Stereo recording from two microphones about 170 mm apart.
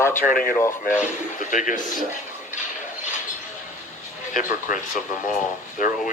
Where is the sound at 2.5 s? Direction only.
45° left (ahead or behind).